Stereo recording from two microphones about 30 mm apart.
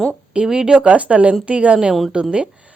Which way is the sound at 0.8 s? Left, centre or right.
Right.